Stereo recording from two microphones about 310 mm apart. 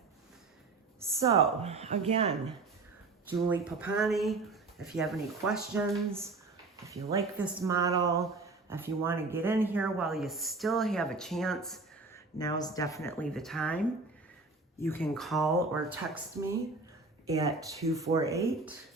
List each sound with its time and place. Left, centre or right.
0.9 s speech: centre
3.2 s a man's voice: centre
12.4 s a man's voice: centre
17.2 s speech: centre